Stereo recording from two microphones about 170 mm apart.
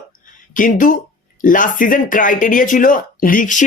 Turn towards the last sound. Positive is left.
turn(degrees=50)  # may be behind; listen again after turning